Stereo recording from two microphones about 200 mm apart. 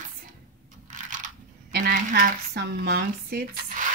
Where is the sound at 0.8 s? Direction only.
40° right (ahead or behind).